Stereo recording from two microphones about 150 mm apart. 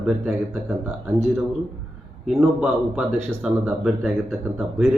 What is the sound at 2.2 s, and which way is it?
Speech, 5° right (ahead or behind).